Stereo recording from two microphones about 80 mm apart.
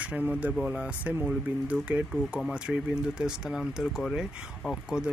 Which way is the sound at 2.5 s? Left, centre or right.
Centre.